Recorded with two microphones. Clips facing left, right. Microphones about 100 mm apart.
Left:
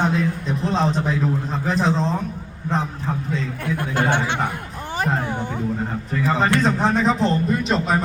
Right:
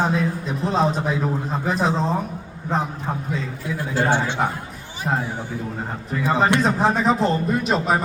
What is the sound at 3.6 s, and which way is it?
Speech, 60° left (ahead or behind).